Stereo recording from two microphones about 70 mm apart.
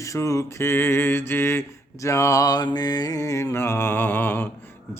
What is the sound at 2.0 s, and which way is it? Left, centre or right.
Mantra, left.